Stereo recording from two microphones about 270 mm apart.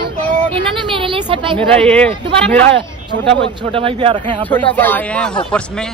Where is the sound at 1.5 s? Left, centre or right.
Centre.